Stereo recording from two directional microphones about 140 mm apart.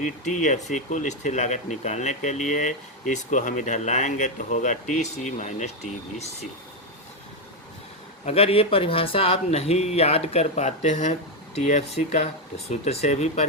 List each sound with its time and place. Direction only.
0.0 s speech: 60° left (ahead or behind)
8.2 s speech: 45° left (ahead or behind)